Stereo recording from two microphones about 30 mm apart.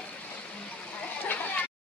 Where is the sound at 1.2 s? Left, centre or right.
Left.